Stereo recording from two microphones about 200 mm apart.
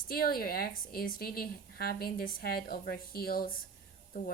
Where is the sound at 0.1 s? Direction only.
45° left (ahead or behind).